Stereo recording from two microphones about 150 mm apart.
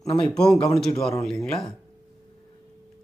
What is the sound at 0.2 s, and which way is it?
A man's voice, 5° left (ahead or behind).